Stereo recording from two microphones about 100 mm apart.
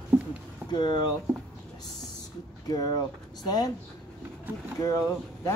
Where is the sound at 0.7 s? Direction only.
45° left (ahead or behind).